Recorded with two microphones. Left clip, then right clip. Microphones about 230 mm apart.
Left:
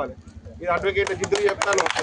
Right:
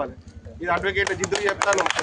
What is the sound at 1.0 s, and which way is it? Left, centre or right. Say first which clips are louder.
Speech: left 1 dB; centre.